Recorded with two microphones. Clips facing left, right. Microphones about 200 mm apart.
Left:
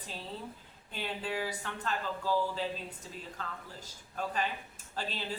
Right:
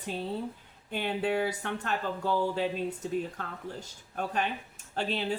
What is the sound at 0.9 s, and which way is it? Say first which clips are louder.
Speech: right 7 dB; 60° right (ahead or behind).